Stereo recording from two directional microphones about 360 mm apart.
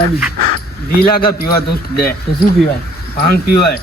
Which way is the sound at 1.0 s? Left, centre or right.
Left.